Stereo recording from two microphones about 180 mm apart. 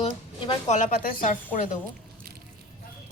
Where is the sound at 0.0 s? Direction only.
25° left (ahead or behind).